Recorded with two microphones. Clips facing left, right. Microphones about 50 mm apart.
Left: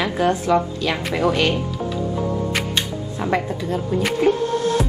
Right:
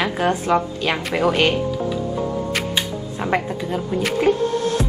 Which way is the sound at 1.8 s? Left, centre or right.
Centre.